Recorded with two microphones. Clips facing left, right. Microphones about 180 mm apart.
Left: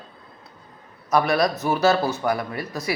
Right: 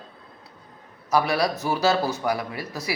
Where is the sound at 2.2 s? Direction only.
50° left (ahead or behind).